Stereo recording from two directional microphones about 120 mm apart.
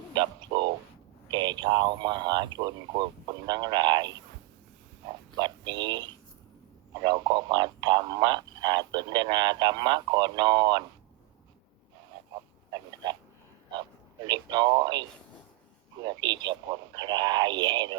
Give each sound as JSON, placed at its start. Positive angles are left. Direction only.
{"t": 0.1, "sound": "a sound", "side_deg": -40}
{"t": 1.3, "sound": "speech", "side_deg": -40}
{"t": 5.4, "sound": "speech", "side_deg": -40}
{"t": 14.3, "sound": "speech", "side_deg": -40}
{"t": 16.0, "sound": "speech", "side_deg": -40}